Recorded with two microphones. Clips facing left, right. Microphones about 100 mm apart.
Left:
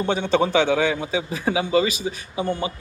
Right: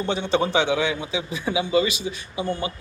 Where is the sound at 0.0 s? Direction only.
50° left (ahead or behind).